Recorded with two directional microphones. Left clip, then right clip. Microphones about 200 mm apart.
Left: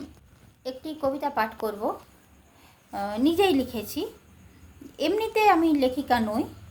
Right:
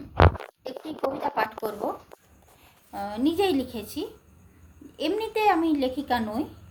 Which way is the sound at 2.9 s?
10° left (ahead or behind).